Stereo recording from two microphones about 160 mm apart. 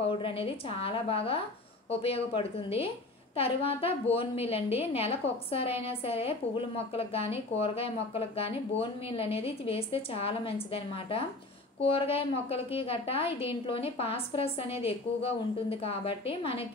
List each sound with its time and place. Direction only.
0.0 s a woman's voice: 35° left (ahead or behind)